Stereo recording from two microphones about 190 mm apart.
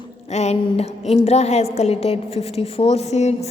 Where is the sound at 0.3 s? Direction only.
35° left (ahead or behind).